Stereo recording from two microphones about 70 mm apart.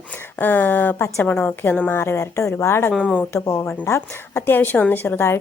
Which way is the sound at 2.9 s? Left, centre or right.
Centre.